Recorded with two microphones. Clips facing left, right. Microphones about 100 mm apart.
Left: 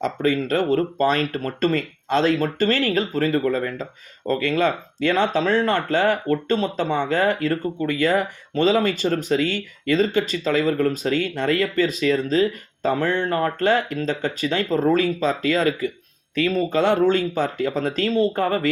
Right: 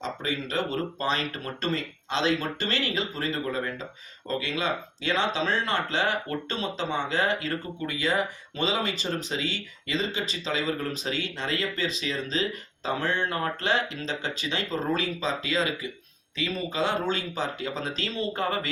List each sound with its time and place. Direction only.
0.0 s speech: 50° left (ahead or behind)